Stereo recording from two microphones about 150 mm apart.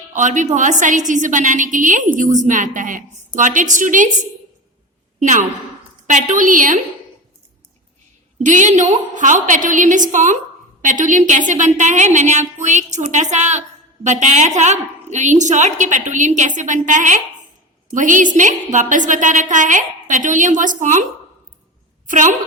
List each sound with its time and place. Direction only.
0.1 s a woman's voice: 55° right (ahead or behind)
5.2 s a woman's voice: 55° right (ahead or behind)
8.4 s a woman's voice: 55° right (ahead or behind)